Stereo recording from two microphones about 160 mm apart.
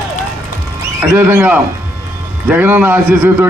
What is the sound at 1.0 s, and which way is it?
Speech, 15° right (ahead or behind).